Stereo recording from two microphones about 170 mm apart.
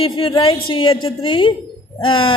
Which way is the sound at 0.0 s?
30° left (ahead or behind).